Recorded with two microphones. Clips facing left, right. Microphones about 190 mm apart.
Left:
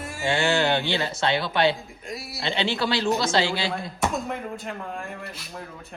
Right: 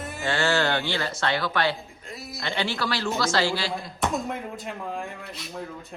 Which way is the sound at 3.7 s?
Centre (ahead or behind).